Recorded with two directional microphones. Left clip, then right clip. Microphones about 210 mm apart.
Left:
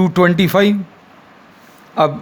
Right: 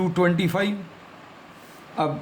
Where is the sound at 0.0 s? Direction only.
40° left (ahead or behind).